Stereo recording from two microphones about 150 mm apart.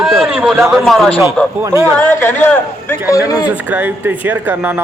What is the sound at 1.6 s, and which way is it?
Speech, 20° right (ahead or behind).